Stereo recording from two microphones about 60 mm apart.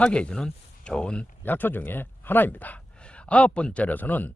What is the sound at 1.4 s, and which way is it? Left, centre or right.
A man's voice, left.